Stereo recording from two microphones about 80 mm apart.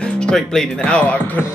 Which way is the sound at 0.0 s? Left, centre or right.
Centre.